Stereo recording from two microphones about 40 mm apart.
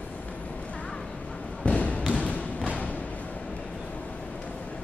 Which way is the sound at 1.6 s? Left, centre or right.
Left.